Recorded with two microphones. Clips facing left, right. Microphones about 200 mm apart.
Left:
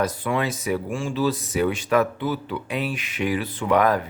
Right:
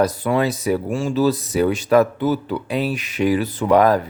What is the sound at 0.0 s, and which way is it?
Speech, 40° right (ahead or behind).